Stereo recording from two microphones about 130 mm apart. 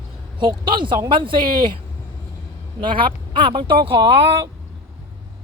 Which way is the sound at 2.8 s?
40° right (ahead or behind).